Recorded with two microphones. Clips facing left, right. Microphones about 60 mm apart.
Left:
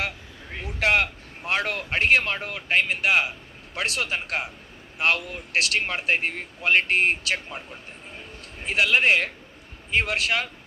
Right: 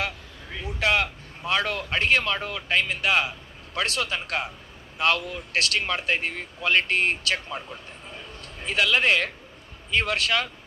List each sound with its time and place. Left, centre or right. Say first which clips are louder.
0.7 s a man's voice: left 1 dB; left
8.5 s speech: left 1 dB; left